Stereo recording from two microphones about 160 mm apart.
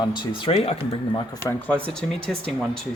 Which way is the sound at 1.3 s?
15° left (ahead or behind).